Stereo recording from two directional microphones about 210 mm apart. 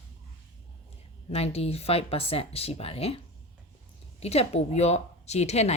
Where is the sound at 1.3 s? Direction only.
30° left (ahead or behind).